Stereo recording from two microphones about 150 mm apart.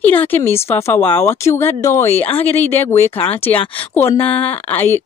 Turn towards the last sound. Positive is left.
turn(degrees=15)  # may be behind; listen again after turning